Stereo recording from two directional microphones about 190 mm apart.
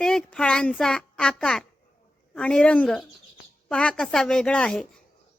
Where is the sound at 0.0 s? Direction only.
5° left (ahead or behind).